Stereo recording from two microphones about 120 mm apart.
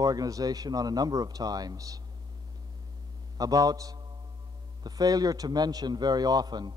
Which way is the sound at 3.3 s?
30° right (ahead or behind).